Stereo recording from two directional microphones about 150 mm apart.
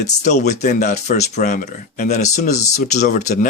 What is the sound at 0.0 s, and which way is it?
Speech, 50° left (ahead or behind).